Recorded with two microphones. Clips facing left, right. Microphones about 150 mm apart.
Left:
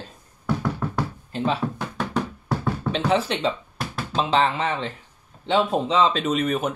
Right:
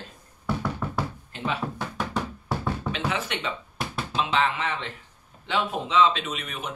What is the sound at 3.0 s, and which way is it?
Speech, 30° left (ahead or behind).